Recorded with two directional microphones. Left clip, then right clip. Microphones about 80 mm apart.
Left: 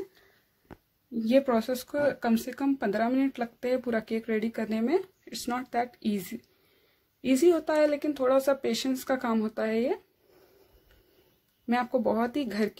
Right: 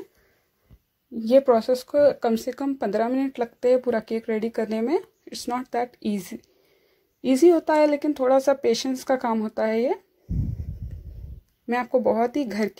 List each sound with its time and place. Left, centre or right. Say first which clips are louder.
1.4 s speech: right 8 dB; right
11.7 s speech: right 5 dB; right